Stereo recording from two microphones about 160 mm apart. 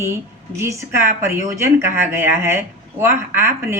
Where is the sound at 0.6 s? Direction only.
15° right (ahead or behind).